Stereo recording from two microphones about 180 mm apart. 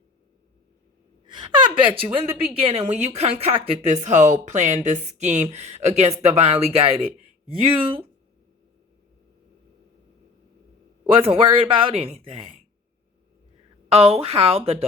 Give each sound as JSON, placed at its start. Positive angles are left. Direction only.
{"t": 1.3, "sound": "speech", "side_deg": -25}
{"t": 11.0, "sound": "speech", "side_deg": -30}
{"t": 13.9, "sound": "speech", "side_deg": -35}